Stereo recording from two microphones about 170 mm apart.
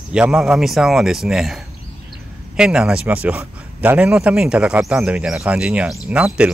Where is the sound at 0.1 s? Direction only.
5° right (ahead or behind).